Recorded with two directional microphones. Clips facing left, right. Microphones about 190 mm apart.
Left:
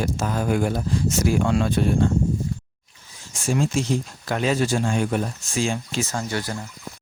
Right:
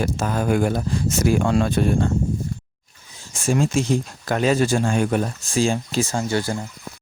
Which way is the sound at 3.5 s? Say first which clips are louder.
Right 3 dB; 50° right (ahead or behind).